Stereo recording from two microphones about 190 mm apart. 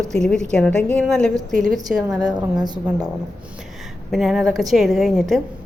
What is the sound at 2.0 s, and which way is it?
Speech, 20° right (ahead or behind).